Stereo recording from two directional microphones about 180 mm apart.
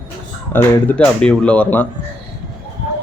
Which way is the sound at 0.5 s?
10° left (ahead or behind).